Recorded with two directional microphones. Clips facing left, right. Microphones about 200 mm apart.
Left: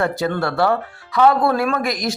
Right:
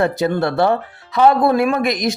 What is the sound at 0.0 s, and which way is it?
Speech, 20° right (ahead or behind).